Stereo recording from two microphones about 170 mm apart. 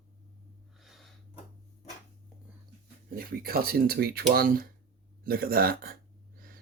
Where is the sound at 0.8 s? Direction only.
Centre (ahead or behind).